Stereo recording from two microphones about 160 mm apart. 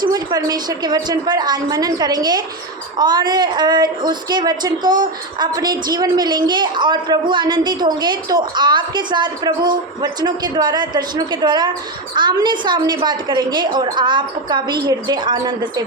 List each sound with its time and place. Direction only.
0.0 s a woman's voice: 25° right (ahead or behind)